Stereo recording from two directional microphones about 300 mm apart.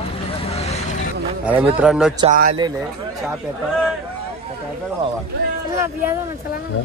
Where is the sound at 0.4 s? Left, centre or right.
Left.